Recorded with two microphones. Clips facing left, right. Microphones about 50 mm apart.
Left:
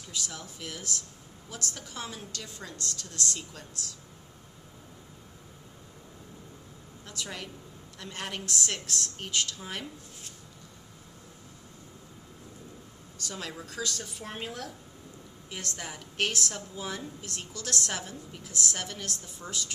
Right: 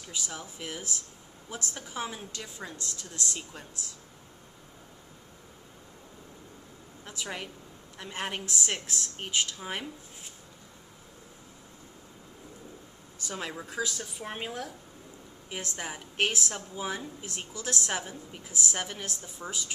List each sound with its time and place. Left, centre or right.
0.1 s a woman's voice: centre
7.1 s a woman's voice: right
13.2 s a woman's voice: right